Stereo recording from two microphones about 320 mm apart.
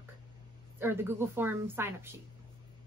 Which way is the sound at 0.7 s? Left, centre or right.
Centre.